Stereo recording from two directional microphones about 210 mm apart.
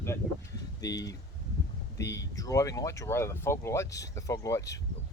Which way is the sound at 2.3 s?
15° left (ahead or behind).